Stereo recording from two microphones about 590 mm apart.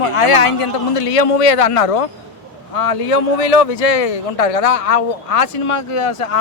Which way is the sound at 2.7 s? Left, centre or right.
Left.